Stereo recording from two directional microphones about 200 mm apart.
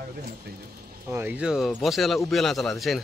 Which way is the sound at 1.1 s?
10° right (ahead or behind).